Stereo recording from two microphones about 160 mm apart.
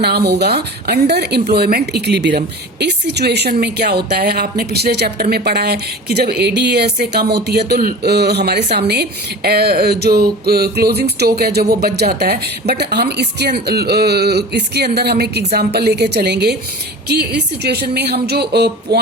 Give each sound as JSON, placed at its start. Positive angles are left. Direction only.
{"t": 0.0, "sound": "a woman's voice", "side_deg": -90}